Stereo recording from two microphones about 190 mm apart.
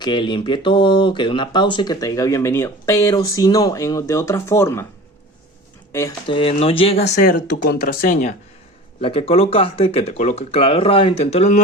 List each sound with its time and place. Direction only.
0.0 s speech: 25° left (ahead or behind)
5.9 s speech: 15° left (ahead or behind)
6.2 s speech: 30° left (ahead or behind)
7.0 s speech: 55° left (ahead or behind)
9.0 s speech: 30° left (ahead or behind)